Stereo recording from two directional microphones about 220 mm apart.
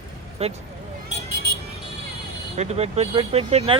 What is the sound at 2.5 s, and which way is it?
Speech, 30° right (ahead or behind).